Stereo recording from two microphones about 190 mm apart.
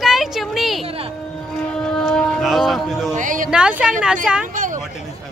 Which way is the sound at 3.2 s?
45° right (ahead or behind).